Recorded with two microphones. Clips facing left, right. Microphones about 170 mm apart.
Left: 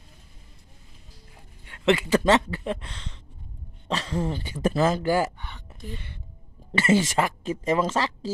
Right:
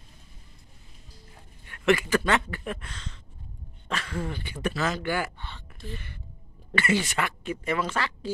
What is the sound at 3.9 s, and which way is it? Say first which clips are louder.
Speech: left 5 dB; 25° left (ahead or behind).